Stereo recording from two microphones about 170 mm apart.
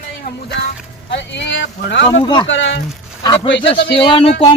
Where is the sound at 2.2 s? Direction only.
25° left (ahead or behind).